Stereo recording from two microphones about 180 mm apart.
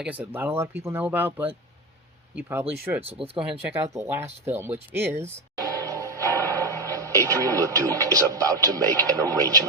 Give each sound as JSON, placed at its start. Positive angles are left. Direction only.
{"t": 0.0, "sound": "speech", "side_deg": -10}
{"t": 3.3, "sound": "speech", "side_deg": -35}
{"t": 3.9, "sound": "speech", "side_deg": -15}
{"t": 5.5, "sound": "music", "side_deg": -20}
{"t": 6.8, "sound": "speech", "side_deg": -15}